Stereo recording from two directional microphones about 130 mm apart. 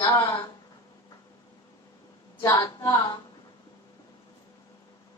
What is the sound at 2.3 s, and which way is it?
Speech, 25° left (ahead or behind).